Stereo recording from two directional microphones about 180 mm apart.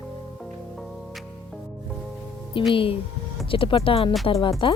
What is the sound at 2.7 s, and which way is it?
Speech, 30° left (ahead or behind).